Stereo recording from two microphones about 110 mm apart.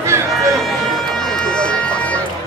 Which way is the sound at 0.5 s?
5° left (ahead or behind).